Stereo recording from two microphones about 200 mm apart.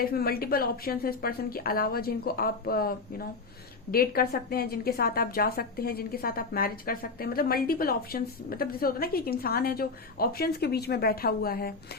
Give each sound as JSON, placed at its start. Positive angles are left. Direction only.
{"t": 0.0, "sound": "a woman's voice", "side_deg": 50}